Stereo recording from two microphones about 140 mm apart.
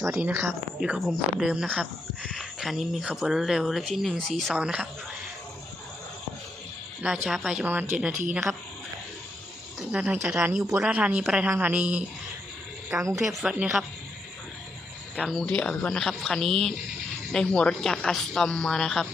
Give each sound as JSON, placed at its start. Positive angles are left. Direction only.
{"t": 0.2, "sound": "speech", "side_deg": -15}
{"t": 7.0, "sound": "speech", "side_deg": -5}
{"t": 9.9, "sound": "speech", "side_deg": -10}
{"t": 13.1, "sound": "speech", "side_deg": -5}
{"t": 15.2, "sound": "speech", "side_deg": 0}
{"t": 15.4, "sound": "speech", "side_deg": 10}